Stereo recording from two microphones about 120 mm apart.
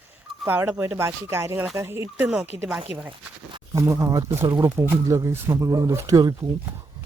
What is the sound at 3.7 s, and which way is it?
Speech, 25° right (ahead or behind).